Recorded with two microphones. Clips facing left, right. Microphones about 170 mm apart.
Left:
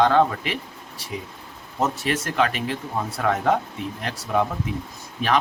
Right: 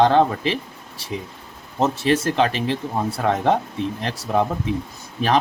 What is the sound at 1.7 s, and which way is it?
Speech, 30° right (ahead or behind).